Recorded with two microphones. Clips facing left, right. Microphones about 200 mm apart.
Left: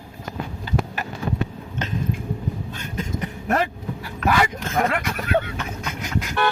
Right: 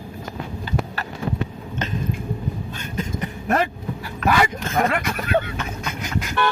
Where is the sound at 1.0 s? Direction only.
15° left (ahead or behind).